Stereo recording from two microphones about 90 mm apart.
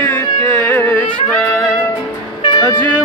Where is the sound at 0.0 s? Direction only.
25° left (ahead or behind).